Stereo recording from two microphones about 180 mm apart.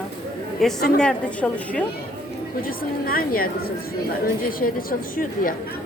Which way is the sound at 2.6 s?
55° left (ahead or behind).